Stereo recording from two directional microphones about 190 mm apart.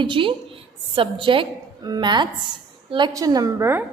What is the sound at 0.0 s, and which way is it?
A woman's voice, 25° right (ahead or behind).